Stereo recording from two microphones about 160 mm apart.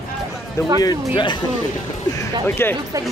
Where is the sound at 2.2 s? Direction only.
15° left (ahead or behind).